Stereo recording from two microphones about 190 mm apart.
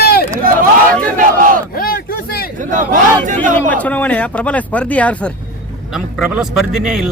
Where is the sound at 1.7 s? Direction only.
50° left (ahead or behind).